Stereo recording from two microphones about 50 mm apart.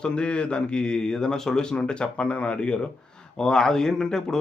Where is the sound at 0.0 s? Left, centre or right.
Left.